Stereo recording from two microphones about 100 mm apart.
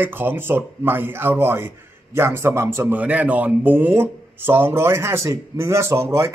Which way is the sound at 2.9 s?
15° right (ahead or behind).